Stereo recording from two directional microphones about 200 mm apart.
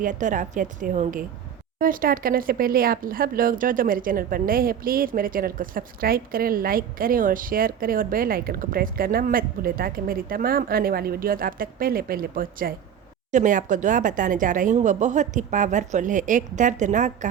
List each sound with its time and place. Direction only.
0.0 s a woman's voice: 40° right (ahead or behind)